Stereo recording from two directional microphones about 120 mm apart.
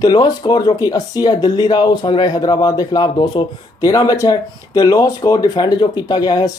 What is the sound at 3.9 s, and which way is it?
Speech, 30° left (ahead or behind).